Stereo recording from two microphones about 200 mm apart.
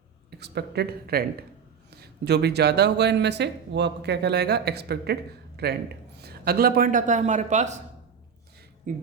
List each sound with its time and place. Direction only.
0.3 s a man's voice: 55° right (ahead or behind); by 7.8 s 35° right (ahead or behind)
8.9 s a man's voice: 40° right (ahead or behind)